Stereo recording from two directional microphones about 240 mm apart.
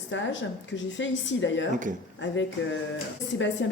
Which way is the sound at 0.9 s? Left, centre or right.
Left.